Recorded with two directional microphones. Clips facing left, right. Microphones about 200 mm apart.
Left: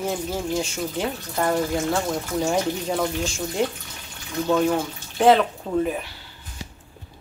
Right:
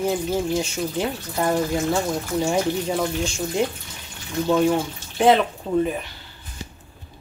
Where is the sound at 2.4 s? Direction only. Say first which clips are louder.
Right 2 dB; centre (ahead or behind).